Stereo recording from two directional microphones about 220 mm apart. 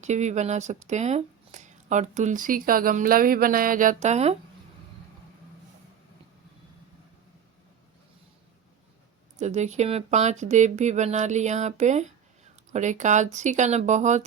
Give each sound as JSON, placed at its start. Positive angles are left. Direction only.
{"t": 0.0, "sound": "speech", "side_deg": -30}
{"t": 9.4, "sound": "speech", "side_deg": -30}